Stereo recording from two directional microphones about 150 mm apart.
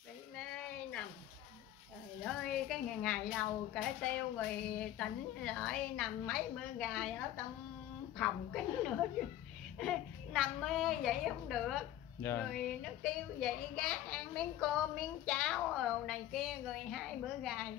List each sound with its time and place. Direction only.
0.4 s a sound: 5° left (ahead or behind)
2.2 s a woman's voice: 5° left (ahead or behind)
8.2 s a woman's voice: 5° left (ahead or behind)
12.2 s speech: 15° left (ahead or behind)
12.4 s a woman's voice: 5° left (ahead or behind)